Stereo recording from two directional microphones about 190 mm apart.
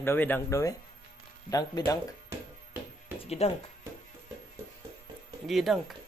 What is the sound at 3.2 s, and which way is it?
Speech, 35° left (ahead or behind).